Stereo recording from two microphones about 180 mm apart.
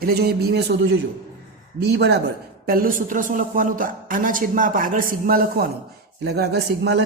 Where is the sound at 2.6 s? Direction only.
55° right (ahead or behind).